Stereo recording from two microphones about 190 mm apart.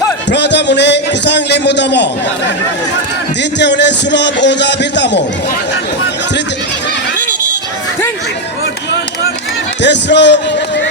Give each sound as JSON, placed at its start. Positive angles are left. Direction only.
{"t": 0.3, "sound": "a sound", "side_deg": 65}
{"t": 3.6, "sound": "speech", "side_deg": 65}
{"t": 9.8, "sound": "speech", "side_deg": 65}